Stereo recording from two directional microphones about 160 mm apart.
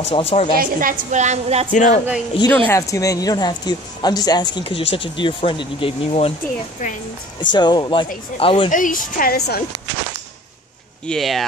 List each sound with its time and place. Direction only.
0.0 s a woman's voice: 40° left (ahead or behind)
0.6 s a woman's voice: 60° right (ahead or behind); by 1.7 s 45° right (ahead or behind)
1.7 s speech: 50° left (ahead or behind)
2.5 s a woman's voice: 15° left (ahead or behind); by 6.3 s 40° left (ahead or behind)
7.3 s a woman's voice: 30° left (ahead or behind)
8.6 s a woman's voice: 55° left (ahead or behind)
11.1 s speech: centre (ahead or behind)